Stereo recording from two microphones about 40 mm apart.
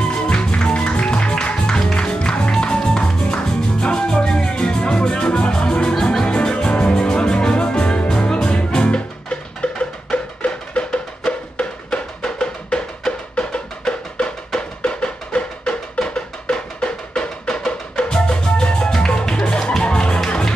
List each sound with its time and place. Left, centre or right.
0.0 s music: left